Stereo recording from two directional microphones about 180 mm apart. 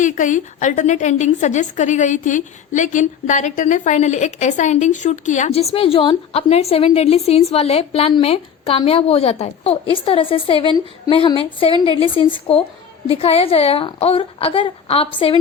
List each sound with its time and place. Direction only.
0.0 s a woman's voice: 45° left (ahead or behind)